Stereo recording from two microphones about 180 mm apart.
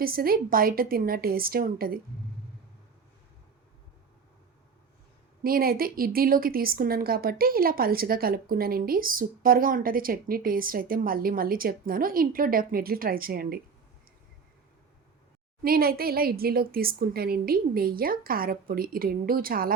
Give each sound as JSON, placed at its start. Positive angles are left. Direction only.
{"t": 0.0, "sound": "a woman's voice", "side_deg": -55}
{"t": 5.4, "sound": "a woman's voice", "side_deg": -55}
{"t": 15.6, "sound": "a woman's voice", "side_deg": -55}